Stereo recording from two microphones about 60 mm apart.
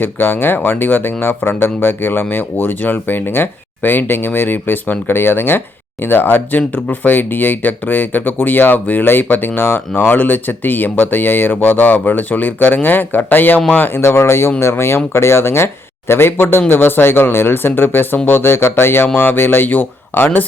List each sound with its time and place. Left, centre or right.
0.0 s speech: left
14.0 s speech: left